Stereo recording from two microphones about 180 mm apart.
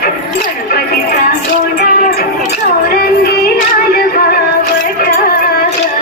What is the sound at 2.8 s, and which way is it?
Music, 60° left (ahead or behind).